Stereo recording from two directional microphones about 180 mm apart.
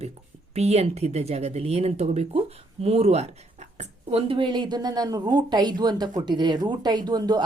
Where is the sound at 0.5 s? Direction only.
35° right (ahead or behind).